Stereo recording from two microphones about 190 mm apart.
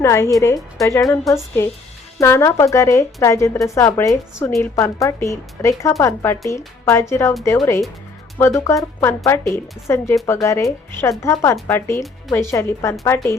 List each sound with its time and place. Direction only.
0.0 s a woman's voice: 15° left (ahead or behind)